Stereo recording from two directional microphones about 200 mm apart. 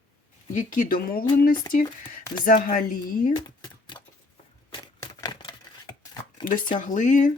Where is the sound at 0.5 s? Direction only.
45° left (ahead or behind).